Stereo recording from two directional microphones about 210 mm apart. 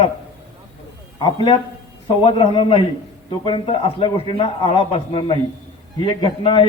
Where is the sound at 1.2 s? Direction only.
25° left (ahead or behind).